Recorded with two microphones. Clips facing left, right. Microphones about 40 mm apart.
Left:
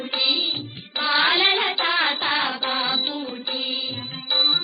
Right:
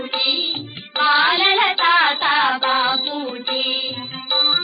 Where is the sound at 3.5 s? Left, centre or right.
Right.